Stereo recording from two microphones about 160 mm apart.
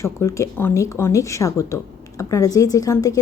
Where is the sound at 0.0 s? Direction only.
20° left (ahead or behind).